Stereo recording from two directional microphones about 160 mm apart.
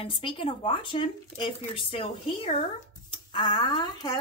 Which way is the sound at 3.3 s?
30° left (ahead or behind).